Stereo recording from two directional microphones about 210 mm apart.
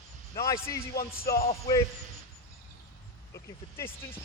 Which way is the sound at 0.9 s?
45° left (ahead or behind).